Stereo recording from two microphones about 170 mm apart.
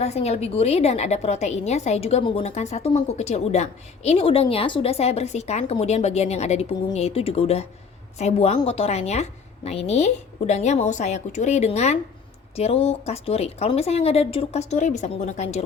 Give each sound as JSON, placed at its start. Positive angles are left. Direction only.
{"t": 0.0, "sound": "a woman's voice", "side_deg": 40}